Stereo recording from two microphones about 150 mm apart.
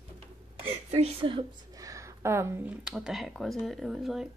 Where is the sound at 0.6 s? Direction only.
40° right (ahead or behind).